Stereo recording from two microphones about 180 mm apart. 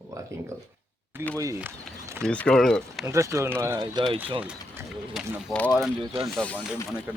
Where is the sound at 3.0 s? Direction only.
15° right (ahead or behind).